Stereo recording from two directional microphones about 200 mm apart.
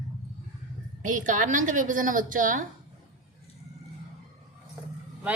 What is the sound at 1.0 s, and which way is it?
A woman's voice, 40° right (ahead or behind).